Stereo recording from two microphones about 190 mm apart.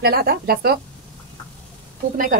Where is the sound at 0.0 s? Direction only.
55° right (ahead or behind).